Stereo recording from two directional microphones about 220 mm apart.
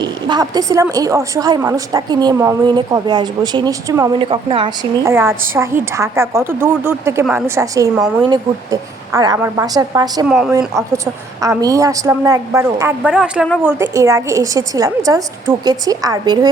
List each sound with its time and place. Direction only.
0.0 s a woman's voice: 20° right (ahead or behind)
5.0 s a woman's voice: 10° right (ahead or behind)
10.2 s speech: centre (ahead or behind)
10.8 s a woman's voice: 15° right (ahead or behind)
13.0 s a woman's voice: 5° right (ahead or behind)